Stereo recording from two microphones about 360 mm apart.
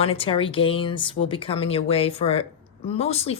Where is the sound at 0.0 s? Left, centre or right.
Centre.